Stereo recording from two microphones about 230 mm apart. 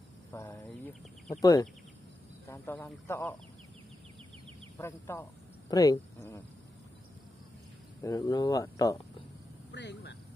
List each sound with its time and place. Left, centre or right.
0.3 s a sound: centre
1.4 s speech: centre
4.7 s speech: centre
8.0 s speech: centre
9.7 s speech: left